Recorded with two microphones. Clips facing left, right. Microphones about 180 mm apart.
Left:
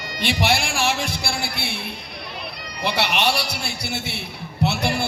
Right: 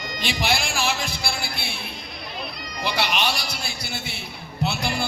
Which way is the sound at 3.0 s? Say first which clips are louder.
Left 3 dB; 65° left (ahead or behind).